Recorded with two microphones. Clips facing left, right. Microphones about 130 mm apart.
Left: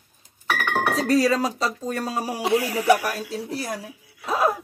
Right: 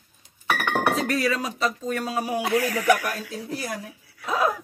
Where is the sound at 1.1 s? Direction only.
35° left (ahead or behind).